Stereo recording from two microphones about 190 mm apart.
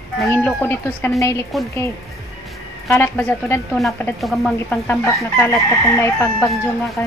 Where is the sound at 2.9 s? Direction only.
10° left (ahead or behind).